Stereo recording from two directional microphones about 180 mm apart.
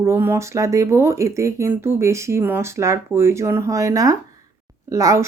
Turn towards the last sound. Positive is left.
turn(degrees=-20)  # may be behind; listen again after turning